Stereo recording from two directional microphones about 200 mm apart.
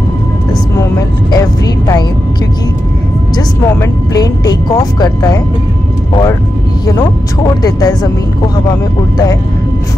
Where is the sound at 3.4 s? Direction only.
20° left (ahead or behind).